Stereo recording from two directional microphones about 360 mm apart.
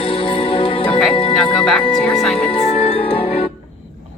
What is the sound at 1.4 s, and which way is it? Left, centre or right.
Speech, centre.